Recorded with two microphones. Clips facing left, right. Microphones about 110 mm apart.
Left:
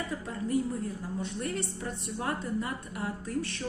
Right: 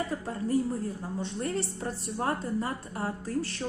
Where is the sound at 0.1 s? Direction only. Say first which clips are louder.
Right 2 dB; 35° right (ahead or behind).